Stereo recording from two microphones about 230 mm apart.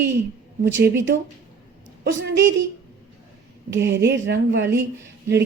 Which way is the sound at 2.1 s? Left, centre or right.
Right.